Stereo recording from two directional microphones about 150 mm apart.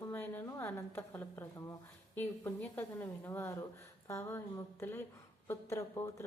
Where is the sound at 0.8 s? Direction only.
15° left (ahead or behind).